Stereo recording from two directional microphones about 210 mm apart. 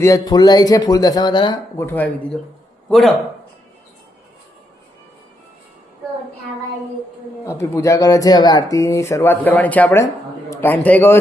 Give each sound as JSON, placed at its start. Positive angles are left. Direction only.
{"t": 0.0, "sound": "a man's voice", "side_deg": 15}
{"t": 7.4, "sound": "speech", "side_deg": 15}